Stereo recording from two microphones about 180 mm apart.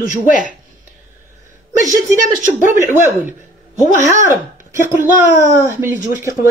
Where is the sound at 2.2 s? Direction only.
45° right (ahead or behind).